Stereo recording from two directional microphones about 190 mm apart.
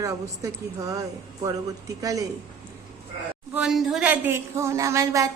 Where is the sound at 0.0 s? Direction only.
15° right (ahead or behind).